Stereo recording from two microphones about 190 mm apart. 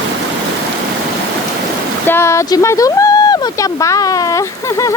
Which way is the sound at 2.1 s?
15° left (ahead or behind).